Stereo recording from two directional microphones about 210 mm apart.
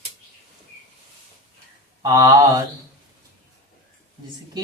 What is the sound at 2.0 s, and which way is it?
Mantra, 15° right (ahead or behind).